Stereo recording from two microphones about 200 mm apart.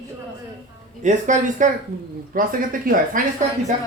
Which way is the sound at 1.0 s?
40° right (ahead or behind).